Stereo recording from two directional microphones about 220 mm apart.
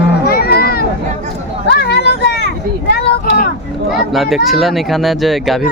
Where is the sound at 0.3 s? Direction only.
45° left (ahead or behind).